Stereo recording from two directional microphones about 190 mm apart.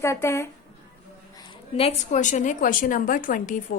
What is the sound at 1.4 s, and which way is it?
A woman's voice, 25° left (ahead or behind).